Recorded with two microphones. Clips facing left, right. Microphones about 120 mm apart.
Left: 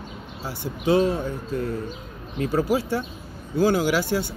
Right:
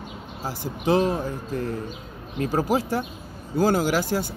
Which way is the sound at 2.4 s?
40° right (ahead or behind).